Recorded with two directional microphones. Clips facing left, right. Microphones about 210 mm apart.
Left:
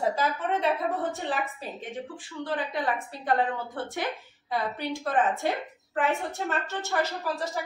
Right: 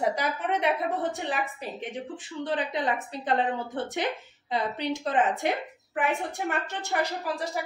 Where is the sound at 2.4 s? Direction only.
20° right (ahead or behind).